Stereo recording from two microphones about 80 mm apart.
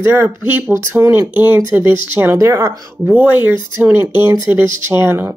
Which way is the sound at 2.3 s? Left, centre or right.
Right.